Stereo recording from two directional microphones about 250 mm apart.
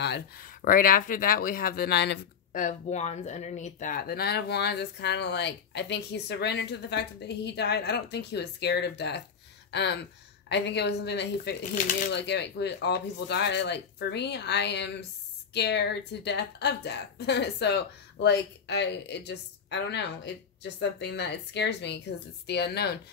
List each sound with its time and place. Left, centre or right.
0.0 s speech: left
11.7 s speech: left
12.1 s speech: left